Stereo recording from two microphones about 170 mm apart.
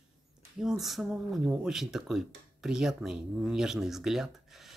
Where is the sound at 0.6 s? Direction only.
Centre (ahead or behind).